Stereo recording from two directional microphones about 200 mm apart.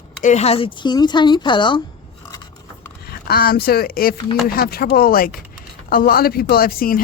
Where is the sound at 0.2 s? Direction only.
35° left (ahead or behind).